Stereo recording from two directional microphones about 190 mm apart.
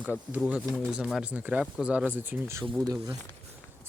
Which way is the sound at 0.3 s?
5° right (ahead or behind).